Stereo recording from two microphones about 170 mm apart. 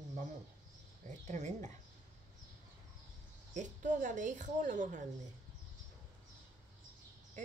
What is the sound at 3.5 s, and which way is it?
A woman's voice, 50° right (ahead or behind).